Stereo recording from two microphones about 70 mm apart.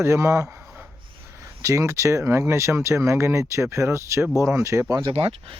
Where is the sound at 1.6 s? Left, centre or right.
Right.